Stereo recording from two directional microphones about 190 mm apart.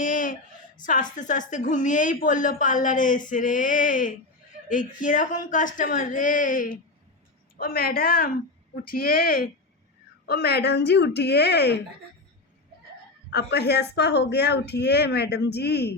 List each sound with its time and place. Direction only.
0.0 s a sound: 45° left (ahead or behind)
0.9 s a woman's voice: 45° left (ahead or behind); by 11.8 s 60° left (ahead or behind)
13.3 s speech: 60° left (ahead or behind)